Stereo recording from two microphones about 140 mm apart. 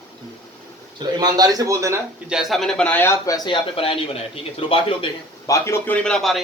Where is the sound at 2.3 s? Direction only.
Centre (ahead or behind); by 3.5 s 25° left (ahead or behind).